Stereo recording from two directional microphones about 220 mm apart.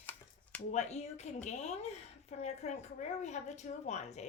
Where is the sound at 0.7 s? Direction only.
30° left (ahead or behind).